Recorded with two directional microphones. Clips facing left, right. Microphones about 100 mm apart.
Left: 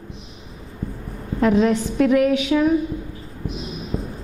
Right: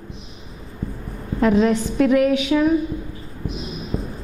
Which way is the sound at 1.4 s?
10° right (ahead or behind).